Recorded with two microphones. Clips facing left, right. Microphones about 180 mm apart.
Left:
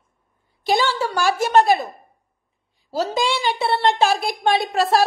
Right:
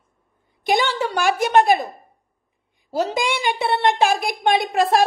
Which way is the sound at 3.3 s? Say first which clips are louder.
Even; 15° right (ahead or behind).